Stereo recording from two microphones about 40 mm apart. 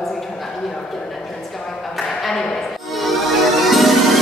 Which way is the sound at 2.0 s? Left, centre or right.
Centre.